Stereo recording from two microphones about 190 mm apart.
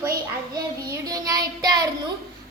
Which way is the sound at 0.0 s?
20° right (ahead or behind).